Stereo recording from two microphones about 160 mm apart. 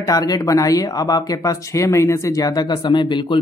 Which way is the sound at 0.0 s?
25° left (ahead or behind).